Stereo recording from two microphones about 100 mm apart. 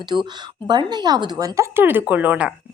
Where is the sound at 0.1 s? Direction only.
40° right (ahead or behind); by 2.5 s 15° right (ahead or behind).